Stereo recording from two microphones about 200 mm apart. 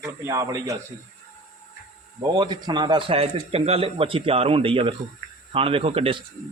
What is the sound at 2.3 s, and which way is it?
Speech, 20° right (ahead or behind).